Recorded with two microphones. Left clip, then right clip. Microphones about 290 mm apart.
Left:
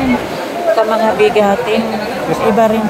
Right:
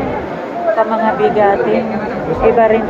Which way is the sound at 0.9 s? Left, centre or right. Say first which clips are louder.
Left 2 dB; left.